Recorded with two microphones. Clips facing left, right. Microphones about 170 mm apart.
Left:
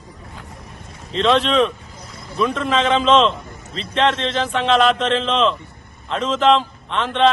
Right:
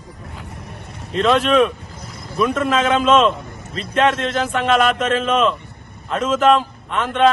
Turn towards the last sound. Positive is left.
turn(degrees=-5)  # may be behind; listen again after turning